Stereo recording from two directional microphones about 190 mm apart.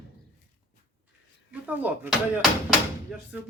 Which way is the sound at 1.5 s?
10° right (ahead or behind).